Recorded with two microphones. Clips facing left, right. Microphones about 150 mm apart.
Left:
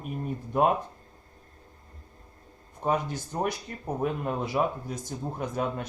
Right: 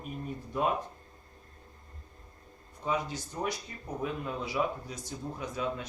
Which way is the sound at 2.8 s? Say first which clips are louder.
Left 5 dB; 50° left (ahead or behind).